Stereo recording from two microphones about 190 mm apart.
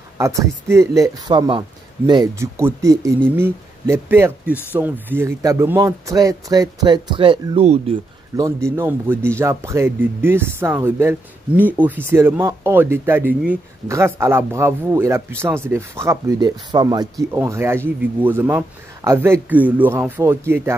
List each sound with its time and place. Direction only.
0.2 s speech: 15° right (ahead or behind); by 7.8 s 30° right (ahead or behind)
8.4 s speech: 15° right (ahead or behind)